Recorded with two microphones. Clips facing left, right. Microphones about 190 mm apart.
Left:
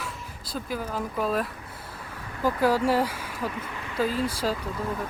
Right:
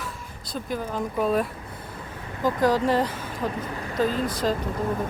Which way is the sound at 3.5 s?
35° right (ahead or behind).